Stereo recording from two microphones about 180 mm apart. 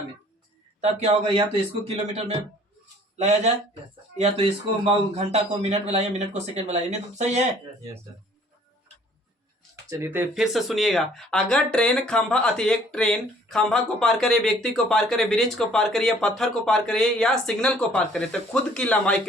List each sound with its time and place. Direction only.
0.8 s a man's voice: 35° right (ahead or behind)
3.2 s a man's voice: 40° right (ahead or behind)
9.9 s speech: 15° right (ahead or behind); by 19.2 s 5° left (ahead or behind)